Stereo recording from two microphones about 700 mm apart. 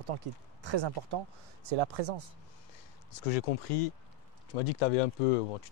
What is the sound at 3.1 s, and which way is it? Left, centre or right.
Speech, left.